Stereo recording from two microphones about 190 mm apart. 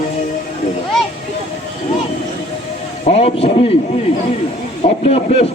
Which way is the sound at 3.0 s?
35° left (ahead or behind).